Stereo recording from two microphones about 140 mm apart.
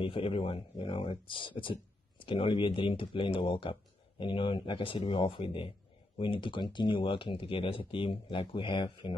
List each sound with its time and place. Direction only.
0.0 s speech: 40° left (ahead or behind)